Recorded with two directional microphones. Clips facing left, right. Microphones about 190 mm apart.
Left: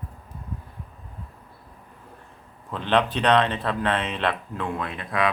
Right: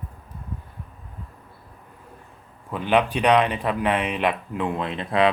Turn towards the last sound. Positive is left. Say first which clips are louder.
# right 5 dB
turn(degrees=-25)  # may be behind; listen again after turning